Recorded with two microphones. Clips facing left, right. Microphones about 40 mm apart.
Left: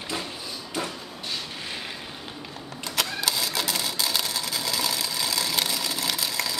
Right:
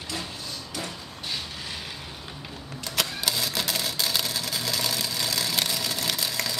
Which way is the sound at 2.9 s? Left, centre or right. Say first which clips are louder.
Left 1 dB; centre.